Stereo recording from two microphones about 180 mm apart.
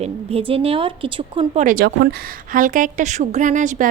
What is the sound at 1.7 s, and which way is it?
A woman's voice, 55° right (ahead or behind).